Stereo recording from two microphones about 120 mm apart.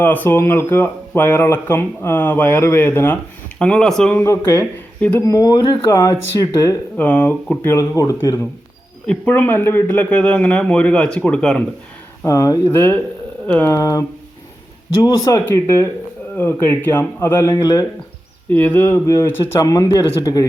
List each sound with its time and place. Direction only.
0.0 s speech: 15° left (ahead or behind)
3.6 s speech: 5° left (ahead or behind)
4.2 s speech: 20° left (ahead or behind)
5.2 s speech: 30° left (ahead or behind)
5.9 s speech: 25° left (ahead or behind)
6.9 s speech: 10° left (ahead or behind); by 8.4 s 30° left (ahead or behind)
9.0 s speech: 15° left (ahead or behind)
12.2 s speech: 30° left (ahead or behind)
15.0 s speech: 30° left (ahead or behind)
18.5 s speech: 15° left (ahead or behind); by 20.4 s 30° left (ahead or behind)